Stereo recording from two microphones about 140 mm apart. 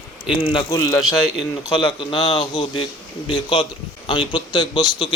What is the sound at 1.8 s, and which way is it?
A man's voice, 35° left (ahead or behind).